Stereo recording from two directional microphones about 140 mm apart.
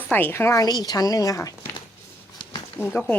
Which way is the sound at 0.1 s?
15° left (ahead or behind).